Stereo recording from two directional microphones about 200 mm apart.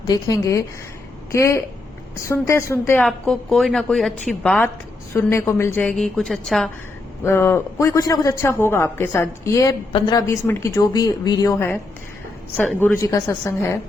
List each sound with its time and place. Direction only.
0.1 s a man's voice: 20° left (ahead or behind); by 6.7 s centre (ahead or behind)
7.3 s a man's voice: 10° left (ahead or behind)